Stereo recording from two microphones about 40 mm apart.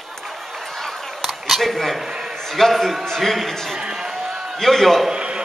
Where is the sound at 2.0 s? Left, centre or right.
Centre.